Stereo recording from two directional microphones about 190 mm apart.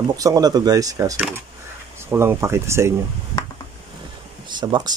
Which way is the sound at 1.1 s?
5° right (ahead or behind).